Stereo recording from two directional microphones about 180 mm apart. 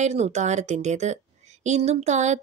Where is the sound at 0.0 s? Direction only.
40° right (ahead or behind).